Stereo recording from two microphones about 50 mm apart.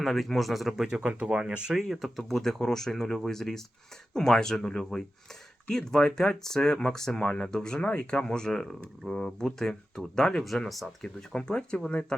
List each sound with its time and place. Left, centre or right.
0.0 s speech: centre
1.0 s speech: centre
7.2 s speech: left